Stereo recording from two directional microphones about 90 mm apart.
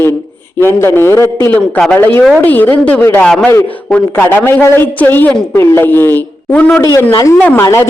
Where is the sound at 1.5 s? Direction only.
10° left (ahead or behind).